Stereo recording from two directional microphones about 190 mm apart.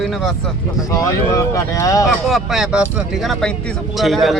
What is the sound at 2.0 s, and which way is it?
Speech, centre (ahead or behind).